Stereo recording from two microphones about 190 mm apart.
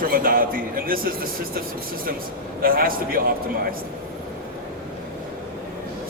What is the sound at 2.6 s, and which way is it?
Speech, 50° right (ahead or behind).